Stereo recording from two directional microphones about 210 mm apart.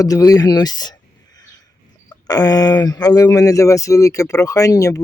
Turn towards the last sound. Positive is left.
turn(degrees=15)  # may be behind; listen again after turning